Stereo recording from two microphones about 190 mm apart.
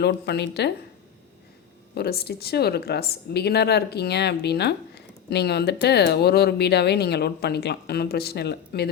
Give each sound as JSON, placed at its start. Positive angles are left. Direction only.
{"t": 0.0, "sound": "speech", "side_deg": 60}
{"t": 2.0, "sound": "speech", "side_deg": 55}